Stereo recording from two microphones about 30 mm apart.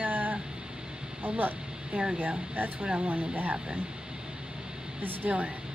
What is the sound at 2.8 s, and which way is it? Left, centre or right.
Speech, right.